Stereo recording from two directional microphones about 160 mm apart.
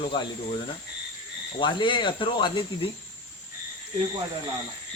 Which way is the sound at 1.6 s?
30° left (ahead or behind).